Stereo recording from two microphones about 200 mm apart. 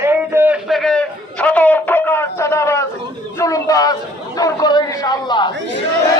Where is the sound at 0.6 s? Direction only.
Centre (ahead or behind); by 5.5 s 20° left (ahead or behind).